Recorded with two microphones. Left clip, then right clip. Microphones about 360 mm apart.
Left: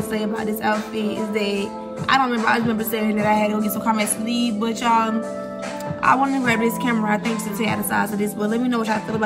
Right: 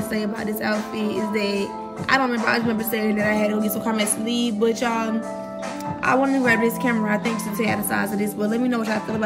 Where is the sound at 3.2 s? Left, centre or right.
Right.